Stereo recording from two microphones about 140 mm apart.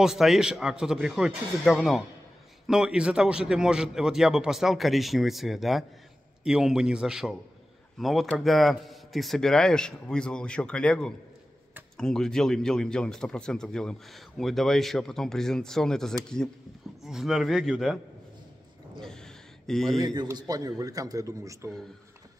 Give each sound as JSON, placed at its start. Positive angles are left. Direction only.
{"t": 0.0, "sound": "speech", "side_deg": -5}
{"t": 18.9, "sound": "a sound", "side_deg": 5}
{"t": 20.0, "sound": "a man's voice", "side_deg": -25}